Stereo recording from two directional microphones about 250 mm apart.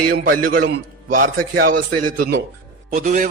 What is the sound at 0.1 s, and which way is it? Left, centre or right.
A man's voice, right.